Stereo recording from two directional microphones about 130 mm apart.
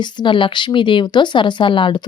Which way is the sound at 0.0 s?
35° left (ahead or behind).